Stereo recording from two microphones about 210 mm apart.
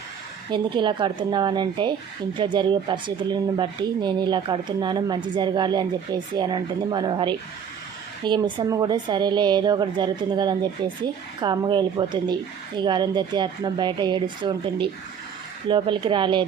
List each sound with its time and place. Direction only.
0.5 s speech: 20° right (ahead or behind)